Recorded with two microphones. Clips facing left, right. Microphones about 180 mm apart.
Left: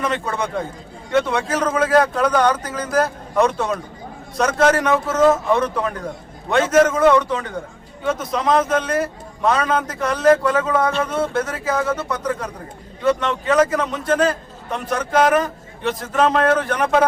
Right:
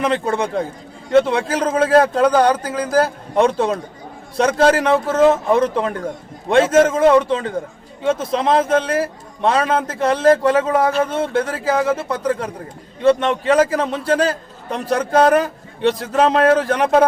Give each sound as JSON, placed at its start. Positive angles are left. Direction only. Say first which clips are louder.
{"t": 0.0, "sound": "a man's voice", "louder": "right 4 dB", "side_deg": -30}